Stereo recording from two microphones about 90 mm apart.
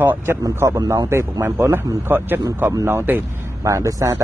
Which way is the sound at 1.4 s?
25° right (ahead or behind).